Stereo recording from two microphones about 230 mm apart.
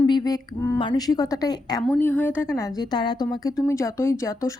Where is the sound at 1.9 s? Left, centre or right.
Centre.